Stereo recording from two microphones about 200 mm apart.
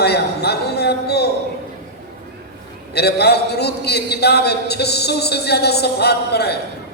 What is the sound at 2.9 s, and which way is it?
A man's voice, 55° left (ahead or behind).